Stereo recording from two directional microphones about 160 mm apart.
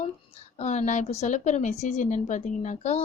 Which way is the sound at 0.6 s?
45° left (ahead or behind).